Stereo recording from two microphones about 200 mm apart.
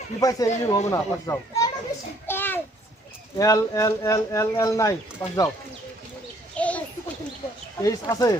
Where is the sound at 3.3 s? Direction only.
15° left (ahead or behind).